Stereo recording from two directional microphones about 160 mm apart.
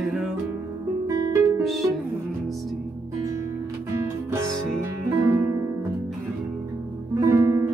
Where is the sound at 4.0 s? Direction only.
15° right (ahead or behind).